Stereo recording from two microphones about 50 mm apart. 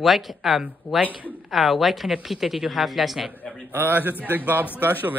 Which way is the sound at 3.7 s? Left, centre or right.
Right.